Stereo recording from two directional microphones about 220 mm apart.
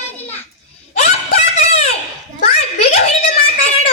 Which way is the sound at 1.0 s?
30° left (ahead or behind).